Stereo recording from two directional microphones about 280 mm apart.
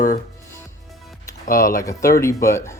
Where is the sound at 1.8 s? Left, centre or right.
Centre.